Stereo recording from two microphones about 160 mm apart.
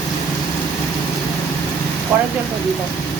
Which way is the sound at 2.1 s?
15° right (ahead or behind).